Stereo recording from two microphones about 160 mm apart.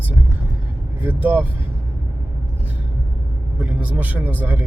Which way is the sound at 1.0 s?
10° right (ahead or behind).